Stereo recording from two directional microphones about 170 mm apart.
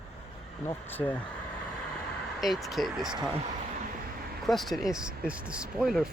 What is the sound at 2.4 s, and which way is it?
Speech, centre (ahead or behind).